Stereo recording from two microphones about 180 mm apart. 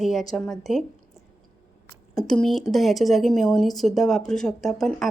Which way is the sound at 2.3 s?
Centre (ahead or behind).